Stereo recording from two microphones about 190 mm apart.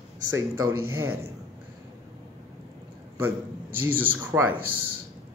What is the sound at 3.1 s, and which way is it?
Speech, 10° right (ahead or behind).